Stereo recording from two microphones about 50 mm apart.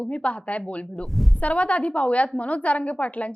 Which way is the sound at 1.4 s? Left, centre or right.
Left.